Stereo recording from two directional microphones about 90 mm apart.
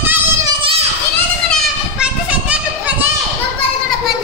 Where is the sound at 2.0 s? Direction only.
15° right (ahead or behind).